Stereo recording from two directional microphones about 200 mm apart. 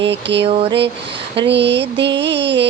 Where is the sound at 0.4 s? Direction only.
30° right (ahead or behind).